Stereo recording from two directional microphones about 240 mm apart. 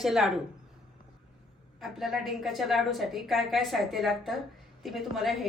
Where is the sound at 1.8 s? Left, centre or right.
Centre.